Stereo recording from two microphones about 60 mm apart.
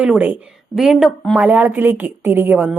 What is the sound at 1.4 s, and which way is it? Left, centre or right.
A woman's voice, right.